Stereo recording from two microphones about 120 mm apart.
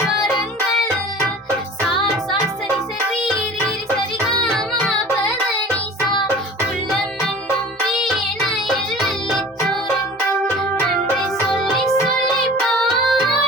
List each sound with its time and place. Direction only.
2.7 s music: centre (ahead or behind)
4.5 s music: centre (ahead or behind)
8.0 s music: centre (ahead or behind)
11.5 s music: centre (ahead or behind)